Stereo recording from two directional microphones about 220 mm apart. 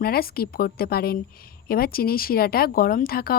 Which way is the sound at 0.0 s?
45° left (ahead or behind).